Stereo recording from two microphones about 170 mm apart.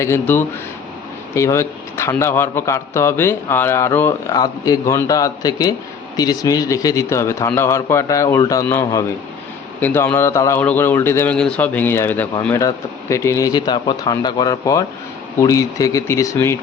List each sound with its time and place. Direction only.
0.0 s a man's voice: 15° left (ahead or behind)